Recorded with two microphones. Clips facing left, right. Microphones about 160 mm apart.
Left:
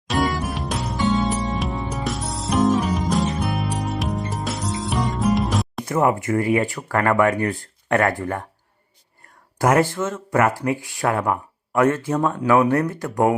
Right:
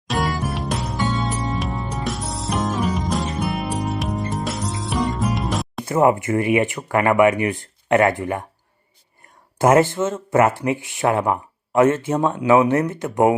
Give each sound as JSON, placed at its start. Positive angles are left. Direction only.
{"t": 0.1, "sound": "music", "side_deg": 0}
{"t": 5.8, "sound": "speech", "side_deg": -25}
{"t": 9.6, "sound": "speech", "side_deg": -25}